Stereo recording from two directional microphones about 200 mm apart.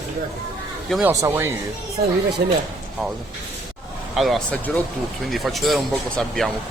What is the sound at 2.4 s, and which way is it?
Speech, 50° right (ahead or behind).